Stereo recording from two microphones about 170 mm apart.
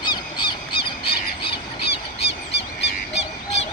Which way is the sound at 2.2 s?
85° left.